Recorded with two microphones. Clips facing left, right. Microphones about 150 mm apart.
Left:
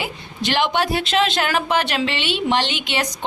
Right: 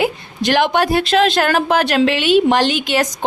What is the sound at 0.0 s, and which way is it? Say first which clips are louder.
A woman's voice: right 8 dB; 45° right (ahead or behind).